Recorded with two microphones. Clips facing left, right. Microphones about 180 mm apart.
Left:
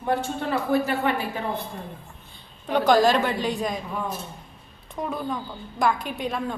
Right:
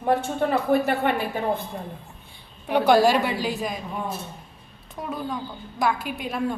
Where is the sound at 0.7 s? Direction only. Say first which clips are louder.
Even; 60° right (ahead or behind).